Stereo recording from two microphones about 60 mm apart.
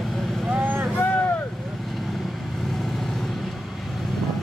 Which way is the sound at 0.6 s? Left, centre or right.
Right.